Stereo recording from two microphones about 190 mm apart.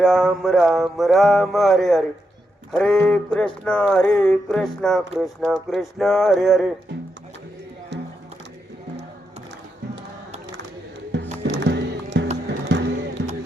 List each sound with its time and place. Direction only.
0.0 s music: 5° right (ahead or behind)
7.9 s music: 65° right (ahead or behind)
11.1 s music: 65° right (ahead or behind)